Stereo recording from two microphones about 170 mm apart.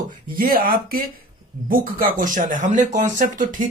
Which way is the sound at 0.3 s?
60° right (ahead or behind).